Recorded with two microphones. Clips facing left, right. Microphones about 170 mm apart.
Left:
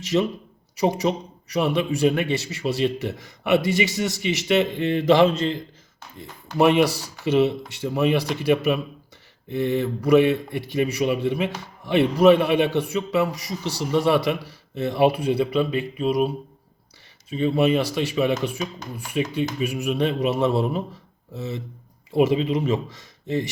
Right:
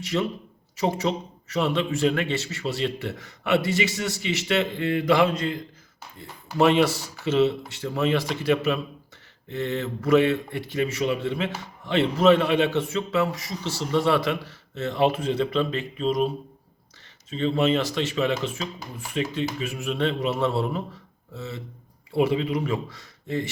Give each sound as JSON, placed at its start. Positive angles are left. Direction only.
{"t": 0.0, "sound": "speech", "side_deg": 20}
{"t": 6.6, "sound": "speech", "side_deg": 15}